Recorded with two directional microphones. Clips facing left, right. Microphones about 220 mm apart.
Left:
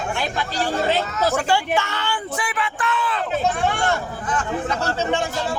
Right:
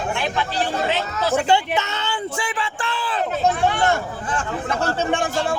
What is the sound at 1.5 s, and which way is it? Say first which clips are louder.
Speech: right 1 dB; 20° right (ahead or behind).